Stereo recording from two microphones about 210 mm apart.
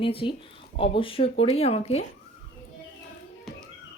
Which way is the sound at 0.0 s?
25° left (ahead or behind).